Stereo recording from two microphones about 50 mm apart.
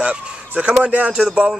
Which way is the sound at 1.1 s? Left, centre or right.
Centre.